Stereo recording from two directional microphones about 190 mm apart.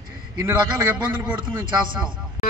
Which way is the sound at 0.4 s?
15° right (ahead or behind).